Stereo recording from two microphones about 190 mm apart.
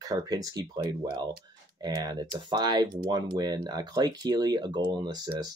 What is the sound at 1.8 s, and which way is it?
Speech, 20° right (ahead or behind).